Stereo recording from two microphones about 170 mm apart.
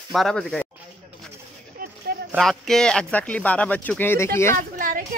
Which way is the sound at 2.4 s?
Centre (ahead or behind).